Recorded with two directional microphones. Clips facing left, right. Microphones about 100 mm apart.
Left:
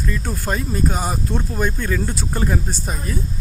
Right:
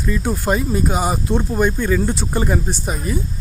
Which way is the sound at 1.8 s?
5° right (ahead or behind).